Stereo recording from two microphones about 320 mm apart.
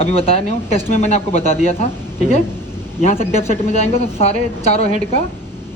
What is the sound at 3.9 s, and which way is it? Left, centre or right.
Speech, centre.